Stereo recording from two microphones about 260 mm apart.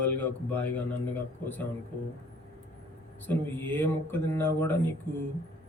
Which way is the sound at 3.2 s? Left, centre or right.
Centre.